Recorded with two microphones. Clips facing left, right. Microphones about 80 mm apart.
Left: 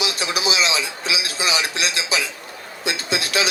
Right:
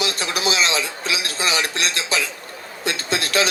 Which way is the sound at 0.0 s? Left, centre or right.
Right.